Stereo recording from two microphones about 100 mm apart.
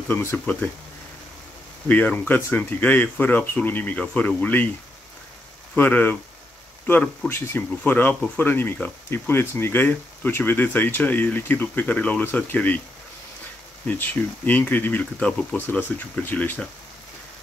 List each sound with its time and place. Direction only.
0.5 s speech: 20° left (ahead or behind)
1.9 s speech: 15° left (ahead or behind)
5.8 s speech: 15° left (ahead or behind)
13.8 s speech: 15° left (ahead or behind)